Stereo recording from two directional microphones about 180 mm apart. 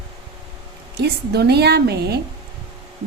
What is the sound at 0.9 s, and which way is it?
A woman's voice, 65° right (ahead or behind).